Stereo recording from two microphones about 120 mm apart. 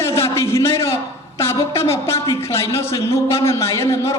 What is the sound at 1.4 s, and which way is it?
A man's voice, 20° left (ahead or behind).